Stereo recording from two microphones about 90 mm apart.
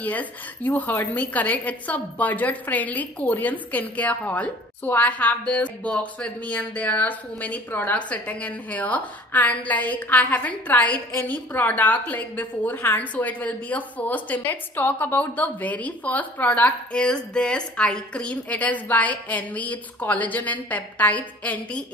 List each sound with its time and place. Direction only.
0.0 s a woman's voice: 20° left (ahead or behind)